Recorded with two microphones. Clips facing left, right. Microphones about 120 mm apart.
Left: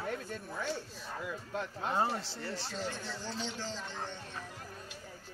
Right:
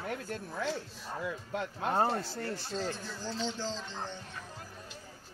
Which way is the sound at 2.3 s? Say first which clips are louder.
Right 3 dB; 50° right (ahead or behind).